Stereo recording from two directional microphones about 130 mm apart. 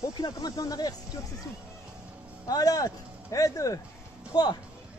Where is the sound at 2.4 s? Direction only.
30° left (ahead or behind).